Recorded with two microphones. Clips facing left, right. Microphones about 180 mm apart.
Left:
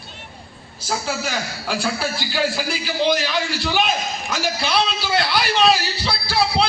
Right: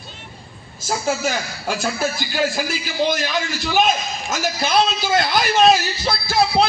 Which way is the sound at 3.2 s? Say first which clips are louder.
Even; 45° right (ahead or behind).